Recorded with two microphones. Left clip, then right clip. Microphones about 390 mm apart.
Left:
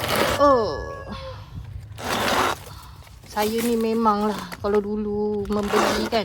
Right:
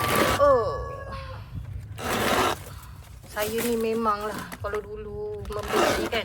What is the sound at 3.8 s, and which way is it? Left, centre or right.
Speech, centre.